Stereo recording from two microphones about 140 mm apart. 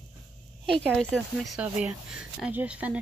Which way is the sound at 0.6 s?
5° left (ahead or behind).